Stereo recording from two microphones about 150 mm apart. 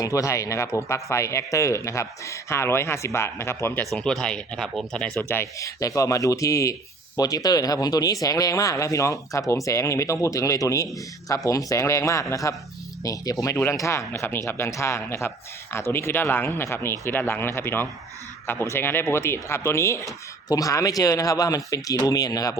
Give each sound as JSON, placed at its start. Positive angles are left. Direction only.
{"t": 0.0, "sound": "speech", "side_deg": 20}
{"t": 3.9, "sound": "speech", "side_deg": 5}
{"t": 5.3, "sound": "speech", "side_deg": 20}